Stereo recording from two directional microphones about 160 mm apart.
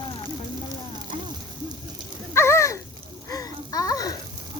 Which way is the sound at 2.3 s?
15° left (ahead or behind).